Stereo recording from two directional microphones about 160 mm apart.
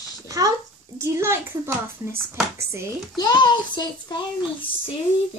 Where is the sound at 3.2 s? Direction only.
25° left (ahead or behind).